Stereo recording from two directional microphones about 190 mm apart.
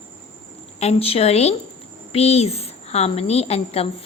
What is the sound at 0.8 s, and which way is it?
A woman's voice, 35° left (ahead or behind).